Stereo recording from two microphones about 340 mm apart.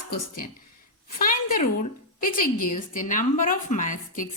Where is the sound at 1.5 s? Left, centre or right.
Left.